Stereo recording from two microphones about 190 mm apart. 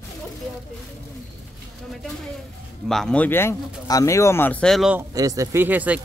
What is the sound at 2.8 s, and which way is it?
Speech, 5° left (ahead or behind).